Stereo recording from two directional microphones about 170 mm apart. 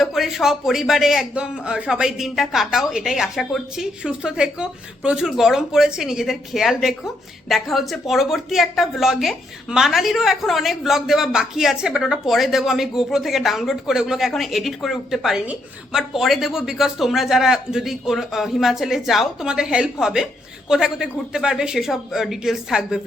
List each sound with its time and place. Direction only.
0.0 s a woman's voice: centre (ahead or behind)